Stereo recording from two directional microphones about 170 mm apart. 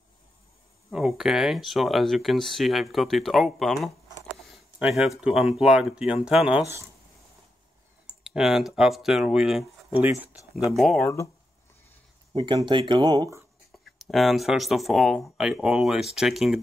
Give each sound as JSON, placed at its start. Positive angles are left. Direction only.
{"t": 0.8, "sound": "speech", "side_deg": 0}
{"t": 4.5, "sound": "a sound", "side_deg": 0}
{"t": 5.2, "sound": "speech", "side_deg": -5}
{"t": 8.1, "sound": "speech", "side_deg": -5}
{"t": 12.4, "sound": "speech", "side_deg": -30}
{"t": 13.9, "sound": "speech", "side_deg": 0}